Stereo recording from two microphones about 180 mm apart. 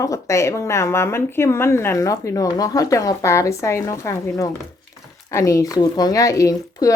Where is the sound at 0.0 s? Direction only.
15° left (ahead or behind).